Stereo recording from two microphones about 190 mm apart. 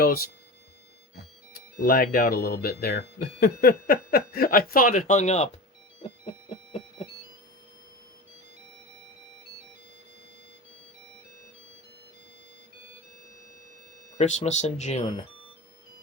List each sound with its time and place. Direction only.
1.5 s speech: 50° left (ahead or behind)
6.0 s music: 25° left (ahead or behind)
14.2 s speech: 40° left (ahead or behind)